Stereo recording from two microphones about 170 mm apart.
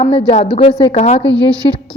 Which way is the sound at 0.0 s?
35° left (ahead or behind).